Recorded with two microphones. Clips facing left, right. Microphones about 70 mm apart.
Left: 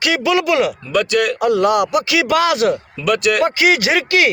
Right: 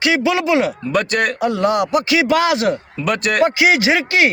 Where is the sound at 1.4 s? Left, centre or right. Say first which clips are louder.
Left 3 dB; right.